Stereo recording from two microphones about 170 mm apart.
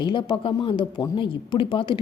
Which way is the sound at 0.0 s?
25° left (ahead or behind).